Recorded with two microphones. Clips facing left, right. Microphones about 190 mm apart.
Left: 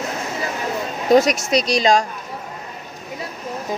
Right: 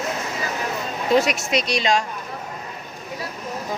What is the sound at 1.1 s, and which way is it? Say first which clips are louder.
Speech: left 5 dB; 40° left (ahead or behind).